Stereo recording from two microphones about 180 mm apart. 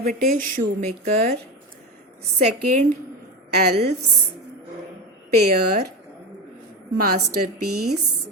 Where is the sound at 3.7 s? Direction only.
65° right (ahead or behind).